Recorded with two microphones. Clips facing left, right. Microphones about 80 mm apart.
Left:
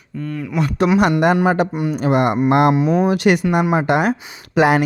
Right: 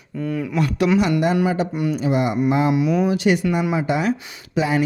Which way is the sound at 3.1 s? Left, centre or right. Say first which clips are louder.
Left 3 dB; left.